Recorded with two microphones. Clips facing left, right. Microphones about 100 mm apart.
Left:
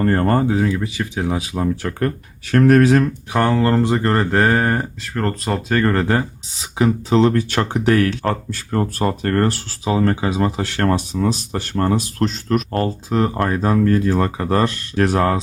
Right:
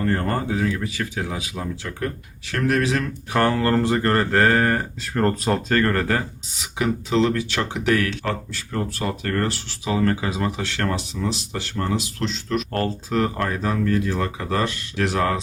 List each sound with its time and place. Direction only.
0.0 s speech: 40° left (ahead or behind)
1.7 s speech: 55° left (ahead or behind)
3.4 s speech: 20° left (ahead or behind)
5.0 s speech: centre (ahead or behind)
5.6 s speech: 15° left (ahead or behind); by 9.9 s 45° left (ahead or behind)
9.9 s speech: 30° left (ahead or behind)
10.6 s speech: 40° left (ahead or behind)
13.1 s speech: 20° left (ahead or behind)
13.5 s speech: 40° left (ahead or behind)